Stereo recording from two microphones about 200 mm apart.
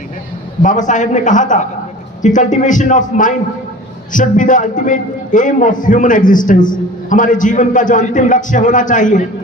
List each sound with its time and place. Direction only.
0.6 s a man's voice: 40° left (ahead or behind)